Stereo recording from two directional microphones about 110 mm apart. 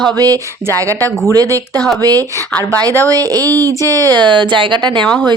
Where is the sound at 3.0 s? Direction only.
35° right (ahead or behind).